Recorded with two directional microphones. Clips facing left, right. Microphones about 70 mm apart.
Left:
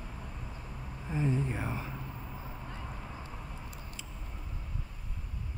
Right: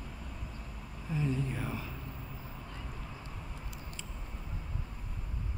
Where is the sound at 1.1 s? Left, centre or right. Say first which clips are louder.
Left 2 dB; left.